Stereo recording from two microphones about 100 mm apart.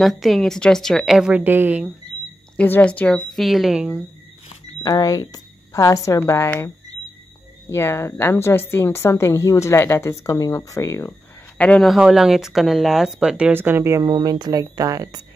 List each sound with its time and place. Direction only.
0.0 s speech: centre (ahead or behind)
1.3 s a woman's voice: 20° right (ahead or behind)
2.5 s a woman's voice: 15° left (ahead or behind); by 4.0 s 10° right (ahead or behind)
4.8 s a woman's voice: 40° left (ahead or behind)
7.7 s a woman's voice: 25° left (ahead or behind)
11.5 s a sound: 10° left (ahead or behind)
11.8 s speech: 5° right (ahead or behind)
13.5 s speech: 20° right (ahead or behind)
14.0 s speech: 40° right (ahead or behind)